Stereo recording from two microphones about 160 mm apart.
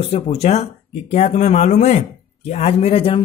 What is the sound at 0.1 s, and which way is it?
Speech, 40° left (ahead or behind).